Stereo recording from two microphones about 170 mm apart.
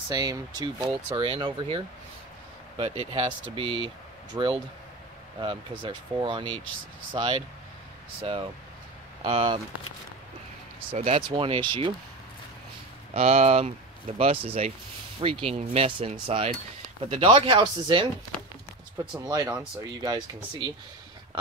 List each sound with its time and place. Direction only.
0.1 s speech: 25° right (ahead or behind)
11.0 s speech: 35° right (ahead or behind)
13.1 s speech: 40° right (ahead or behind)
19.1 s speech: 20° right (ahead or behind)